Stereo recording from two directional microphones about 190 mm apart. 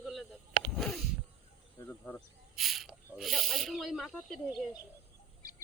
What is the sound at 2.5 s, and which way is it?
Speech, centre (ahead or behind).